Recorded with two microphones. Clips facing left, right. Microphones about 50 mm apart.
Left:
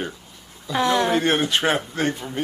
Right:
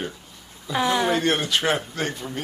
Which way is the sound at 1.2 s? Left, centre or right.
Left.